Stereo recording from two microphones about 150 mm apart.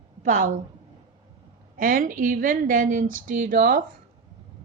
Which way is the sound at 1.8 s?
70° right (ahead or behind).